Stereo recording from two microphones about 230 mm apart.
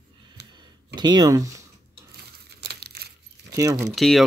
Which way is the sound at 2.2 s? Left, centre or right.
Right.